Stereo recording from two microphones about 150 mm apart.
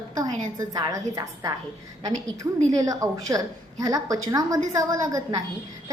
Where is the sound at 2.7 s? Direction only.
25° right (ahead or behind).